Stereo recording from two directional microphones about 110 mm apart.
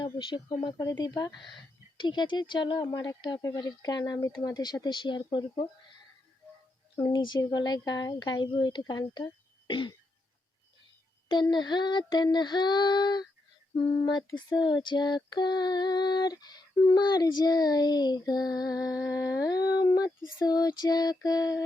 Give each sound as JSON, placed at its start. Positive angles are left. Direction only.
{"t": 0.0, "sound": "speech", "side_deg": 45}
{"t": 0.6, "sound": "female singing", "side_deg": 35}
{"t": 2.0, "sound": "speech", "side_deg": 45}
{"t": 3.4, "sound": "female singing", "side_deg": 35}
{"t": 6.9, "sound": "female singing", "side_deg": 40}
{"t": 11.3, "sound": "female singing", "side_deg": 45}
{"t": 13.7, "sound": "speech", "side_deg": 55}
{"t": 14.0, "sound": "female singing", "side_deg": 40}